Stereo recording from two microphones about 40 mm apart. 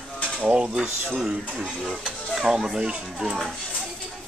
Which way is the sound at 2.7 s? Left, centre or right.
Right.